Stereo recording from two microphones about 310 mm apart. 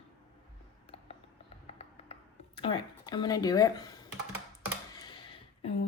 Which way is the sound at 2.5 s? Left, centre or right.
Centre.